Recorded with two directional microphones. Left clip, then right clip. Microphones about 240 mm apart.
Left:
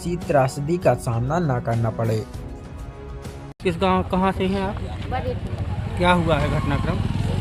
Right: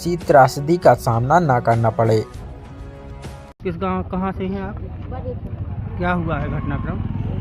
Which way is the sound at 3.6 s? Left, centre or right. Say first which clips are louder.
Left 3 dB; centre.